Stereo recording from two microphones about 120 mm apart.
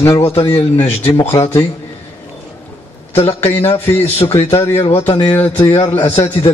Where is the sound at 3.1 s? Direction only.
60° left (ahead or behind).